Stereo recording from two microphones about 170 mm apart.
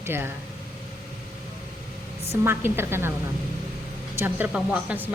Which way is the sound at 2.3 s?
15° right (ahead or behind).